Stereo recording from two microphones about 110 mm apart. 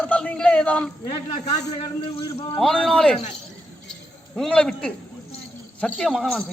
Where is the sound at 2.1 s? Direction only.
55° left (ahead or behind).